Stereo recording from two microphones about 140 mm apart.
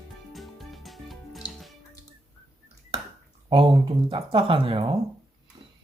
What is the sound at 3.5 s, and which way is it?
Speech, 40° right (ahead or behind).